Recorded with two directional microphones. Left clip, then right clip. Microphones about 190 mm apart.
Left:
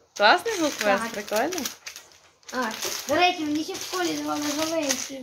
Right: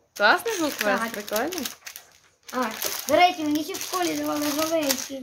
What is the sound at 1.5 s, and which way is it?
Typewriter, 10° right (ahead or behind).